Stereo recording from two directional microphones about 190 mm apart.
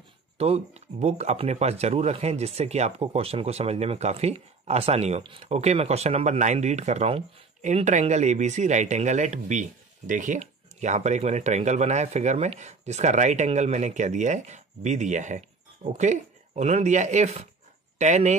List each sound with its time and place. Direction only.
0.4 s speech: 35° right (ahead or behind)